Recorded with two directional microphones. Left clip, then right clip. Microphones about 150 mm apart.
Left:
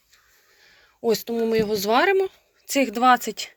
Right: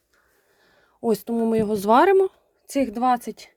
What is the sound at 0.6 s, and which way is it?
Speech, 50° right (ahead or behind).